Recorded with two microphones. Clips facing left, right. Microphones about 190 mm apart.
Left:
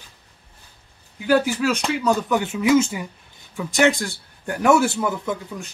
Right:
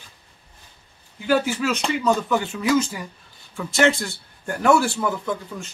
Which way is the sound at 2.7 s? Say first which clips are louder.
Left 4 dB; 25° left (ahead or behind).